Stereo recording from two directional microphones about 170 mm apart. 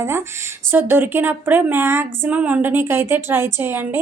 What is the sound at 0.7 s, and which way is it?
Speech, 10° right (ahead or behind).